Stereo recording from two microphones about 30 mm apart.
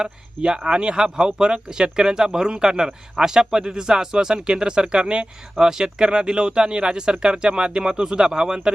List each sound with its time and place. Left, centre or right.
0.0 s speech: right
5.5 s speech: right